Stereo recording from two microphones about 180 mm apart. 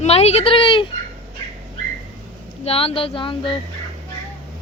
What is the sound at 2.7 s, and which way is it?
Speech, 30° left (ahead or behind).